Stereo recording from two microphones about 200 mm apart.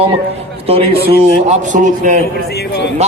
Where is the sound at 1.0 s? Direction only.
35° right (ahead or behind).